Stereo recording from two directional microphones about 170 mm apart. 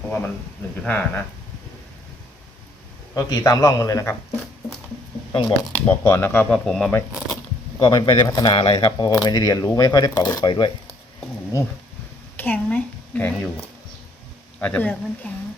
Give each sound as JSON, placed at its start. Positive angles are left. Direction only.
{"t": 0.9, "sound": "speech", "side_deg": 10}
{"t": 3.2, "sound": "speech", "side_deg": 20}
{"t": 5.3, "sound": "speech", "side_deg": 30}
{"t": 5.7, "sound": "speech", "side_deg": 10}
{"t": 7.8, "sound": "speech", "side_deg": 25}
{"t": 12.4, "sound": "a woman's voice", "side_deg": 10}
{"t": 14.6, "sound": "speech", "side_deg": 10}